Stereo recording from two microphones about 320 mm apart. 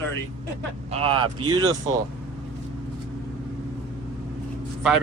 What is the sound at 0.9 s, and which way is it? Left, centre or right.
Speech, centre.